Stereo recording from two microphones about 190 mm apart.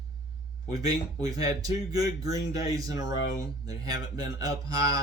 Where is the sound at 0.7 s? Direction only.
20° right (ahead or behind).